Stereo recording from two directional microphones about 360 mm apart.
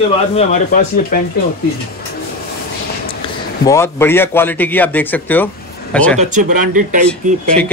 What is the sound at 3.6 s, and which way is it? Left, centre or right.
Speech, centre.